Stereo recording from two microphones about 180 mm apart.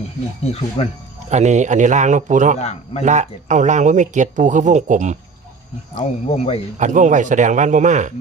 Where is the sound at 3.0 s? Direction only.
40° right (ahead or behind).